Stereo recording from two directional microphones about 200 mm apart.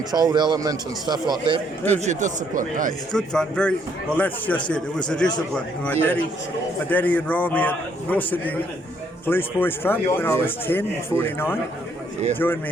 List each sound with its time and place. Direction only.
0.1 s a man's voice: 20° right (ahead or behind)
1.9 s speech: 35° right (ahead or behind)
3.1 s speech: 5° left (ahead or behind)